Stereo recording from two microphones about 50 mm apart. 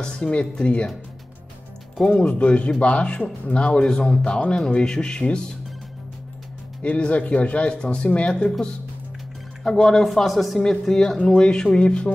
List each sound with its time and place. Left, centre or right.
0.0 s speech: centre
2.0 s speech: centre
6.8 s speech: left
10.0 s speech: centre
10.6 s speech: centre